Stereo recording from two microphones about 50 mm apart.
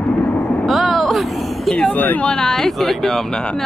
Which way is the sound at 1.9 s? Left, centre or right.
Left.